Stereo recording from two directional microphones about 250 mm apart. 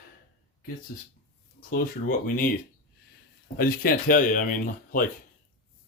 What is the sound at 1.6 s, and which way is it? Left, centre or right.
Speech, left.